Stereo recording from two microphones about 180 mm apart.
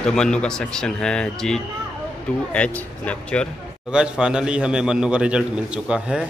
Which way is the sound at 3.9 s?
5° right (ahead or behind).